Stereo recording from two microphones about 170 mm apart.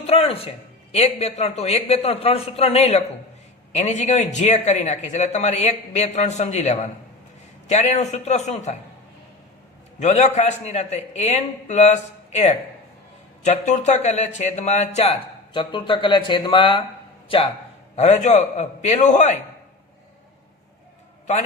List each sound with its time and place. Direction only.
0.0 s a man's voice: 35° left (ahead or behind)
10.0 s a man's voice: 40° left (ahead or behind)
15.5 s speech: 30° left (ahead or behind)